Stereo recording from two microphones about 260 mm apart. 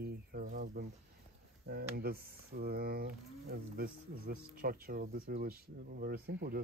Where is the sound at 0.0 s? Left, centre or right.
Right.